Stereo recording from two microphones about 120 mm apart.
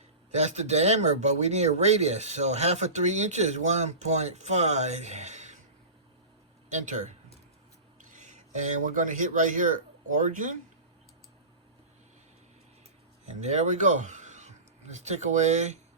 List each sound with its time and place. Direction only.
0.3 s speech: 70° right (ahead or behind)
6.7 s speech: 90° right
8.8 s speech: 90° right
13.2 s speech: 70° right (ahead or behind)